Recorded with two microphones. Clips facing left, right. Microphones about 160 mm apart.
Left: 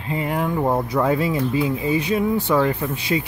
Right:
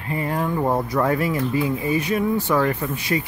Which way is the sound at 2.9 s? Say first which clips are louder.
Left 1 dB; 25° left (ahead or behind).